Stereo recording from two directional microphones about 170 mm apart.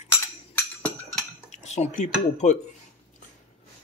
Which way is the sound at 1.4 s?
40° left (ahead or behind).